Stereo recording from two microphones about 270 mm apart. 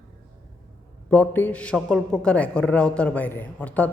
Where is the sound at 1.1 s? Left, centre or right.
Centre.